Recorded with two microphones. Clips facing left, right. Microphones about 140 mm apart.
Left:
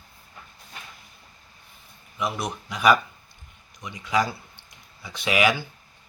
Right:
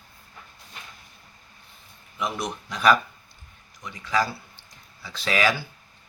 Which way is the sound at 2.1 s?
10° left (ahead or behind).